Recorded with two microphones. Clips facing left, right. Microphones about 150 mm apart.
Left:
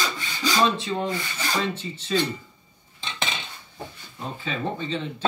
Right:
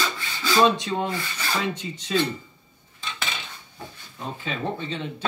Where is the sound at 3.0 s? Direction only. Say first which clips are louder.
Left 2 dB; 25° left (ahead or behind).